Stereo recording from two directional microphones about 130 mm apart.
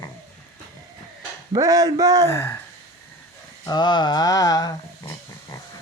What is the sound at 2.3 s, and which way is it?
Speech, 20° left (ahead or behind).